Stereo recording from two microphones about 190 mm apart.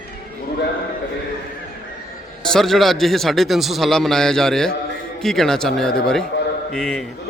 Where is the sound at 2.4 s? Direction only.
Centre (ahead or behind).